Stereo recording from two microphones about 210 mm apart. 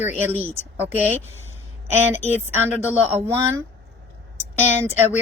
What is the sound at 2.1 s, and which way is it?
Speech, 35° left (ahead or behind).